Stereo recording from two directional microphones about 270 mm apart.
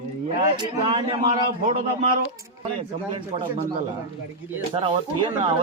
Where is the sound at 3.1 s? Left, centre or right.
Centre.